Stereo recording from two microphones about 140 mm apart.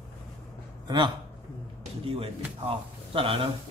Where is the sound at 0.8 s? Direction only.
35° right (ahead or behind).